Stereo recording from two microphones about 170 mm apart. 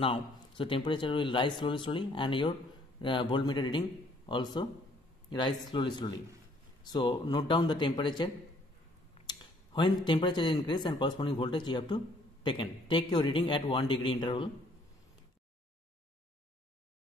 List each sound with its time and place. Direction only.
0.0 s speech: 30° left (ahead or behind)
9.3 s speech: 25° left (ahead or behind)